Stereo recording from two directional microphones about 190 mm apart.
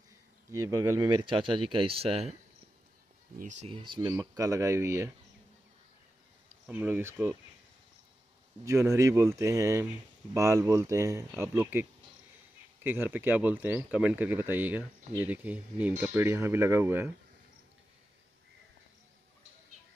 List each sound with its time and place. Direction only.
0.5 s speech: 20° right (ahead or behind)
3.3 s speech: 40° right (ahead or behind)
3.7 s speech: 25° right (ahead or behind)
6.6 s speech: 10° right (ahead or behind)
8.6 s speech: 15° right (ahead or behind)